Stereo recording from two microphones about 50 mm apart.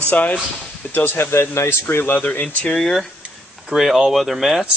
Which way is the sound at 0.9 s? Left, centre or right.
Left.